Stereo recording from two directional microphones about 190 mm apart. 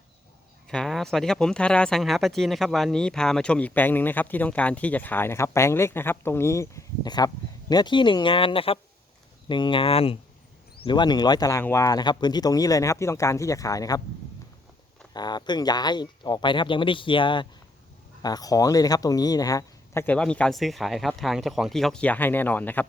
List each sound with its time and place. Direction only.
0.7 s speech: centre (ahead or behind); by 14.0 s 20° left (ahead or behind)
15.1 s speech: 20° left (ahead or behind)